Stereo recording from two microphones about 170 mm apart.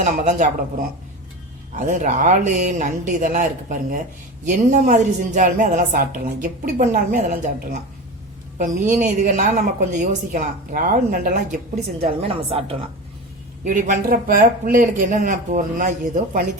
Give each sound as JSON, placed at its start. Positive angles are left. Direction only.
{"t": 0.0, "sound": "a woman's voice", "side_deg": -45}
{"t": 1.7, "sound": "a woman's voice", "side_deg": -45}
{"t": 8.9, "sound": "a woman's voice", "side_deg": -45}
{"t": 12.0, "sound": "a woman's voice", "side_deg": -35}
{"t": 13.7, "sound": "a woman's voice", "side_deg": -50}